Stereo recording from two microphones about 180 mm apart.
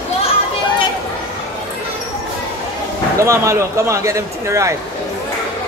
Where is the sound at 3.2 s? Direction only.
15° right (ahead or behind).